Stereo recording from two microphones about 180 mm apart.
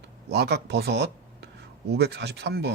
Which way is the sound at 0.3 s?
65° right (ahead or behind).